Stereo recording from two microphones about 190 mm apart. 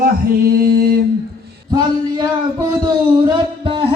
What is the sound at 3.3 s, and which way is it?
Music, 25° right (ahead or behind).